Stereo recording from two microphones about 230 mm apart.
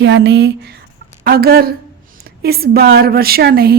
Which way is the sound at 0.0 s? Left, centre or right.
Right.